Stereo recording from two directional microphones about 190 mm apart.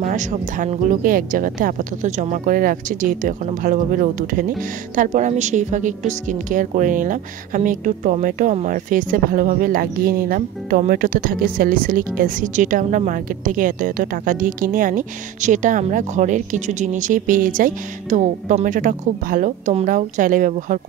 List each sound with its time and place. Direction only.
0.0 s a woman's voice: 40° right (ahead or behind)